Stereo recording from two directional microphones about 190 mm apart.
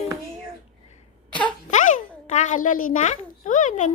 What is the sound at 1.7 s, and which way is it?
A child's voice, 40° left (ahead or behind).